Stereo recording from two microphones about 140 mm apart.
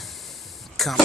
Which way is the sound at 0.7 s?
Centre (ahead or behind).